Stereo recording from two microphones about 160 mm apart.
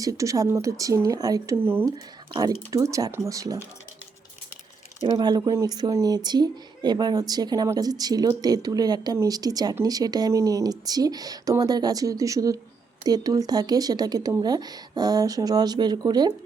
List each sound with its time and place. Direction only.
0.0 s speech: 20° right (ahead or behind)
4.9 s speech: 25° right (ahead or behind)